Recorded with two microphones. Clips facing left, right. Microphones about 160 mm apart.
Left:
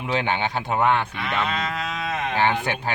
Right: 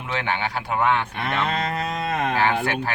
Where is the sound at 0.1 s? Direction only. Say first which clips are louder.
Left 2 dB; 20° left (ahead or behind).